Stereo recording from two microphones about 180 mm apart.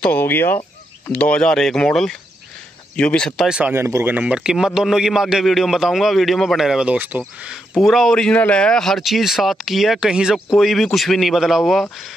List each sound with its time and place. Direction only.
0.0 s speech: 10° left (ahead or behind)